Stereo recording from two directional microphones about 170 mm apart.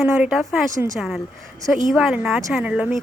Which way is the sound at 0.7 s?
20° right (ahead or behind).